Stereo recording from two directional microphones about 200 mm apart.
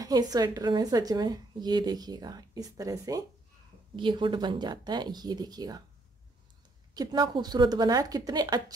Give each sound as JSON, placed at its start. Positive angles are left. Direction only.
{"t": 0.0, "sound": "a woman's voice", "side_deg": -20}
{"t": 6.9, "sound": "a woman's voice", "side_deg": -20}